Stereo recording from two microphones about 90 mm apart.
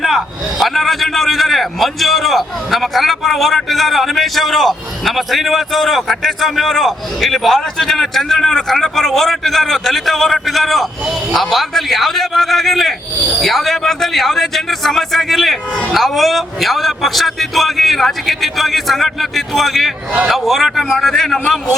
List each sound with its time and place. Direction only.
0.6 s a man's voice: centre (ahead or behind)